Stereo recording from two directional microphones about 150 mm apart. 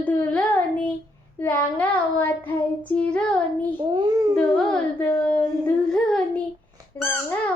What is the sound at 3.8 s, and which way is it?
Speech, 35° right (ahead or behind).